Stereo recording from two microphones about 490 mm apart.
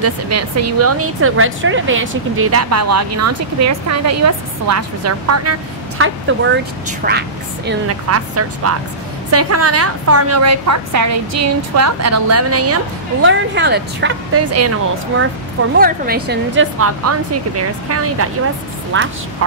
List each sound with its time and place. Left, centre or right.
0.0 s a woman's voice: right
15.8 s a woman's voice: centre